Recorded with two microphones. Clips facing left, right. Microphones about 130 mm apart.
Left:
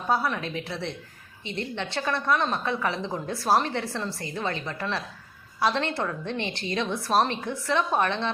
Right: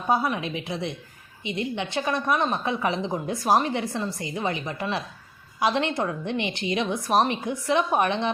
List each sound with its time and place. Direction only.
0.1 s a woman's voice: 15° right (ahead or behind)